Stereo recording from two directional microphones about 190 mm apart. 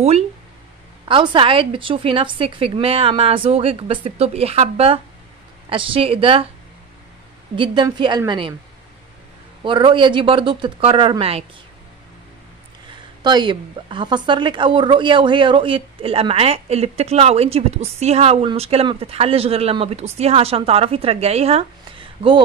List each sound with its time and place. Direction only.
1.0 s a woman's voice: 25° right (ahead or behind)
7.5 s a woman's voice: 25° right (ahead or behind)
9.6 s a woman's voice: 25° right (ahead or behind)
13.2 s a woman's voice: 25° right (ahead or behind)